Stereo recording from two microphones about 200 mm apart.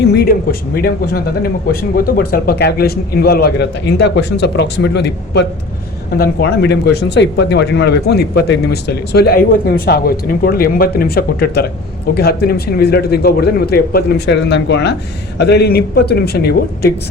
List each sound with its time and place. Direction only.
0.0 s speech: 55° left (ahead or behind)